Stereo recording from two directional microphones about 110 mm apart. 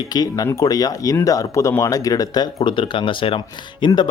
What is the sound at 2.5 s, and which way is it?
Speech, 50° left (ahead or behind).